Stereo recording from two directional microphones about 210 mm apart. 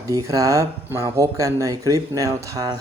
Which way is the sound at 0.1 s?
15° right (ahead or behind).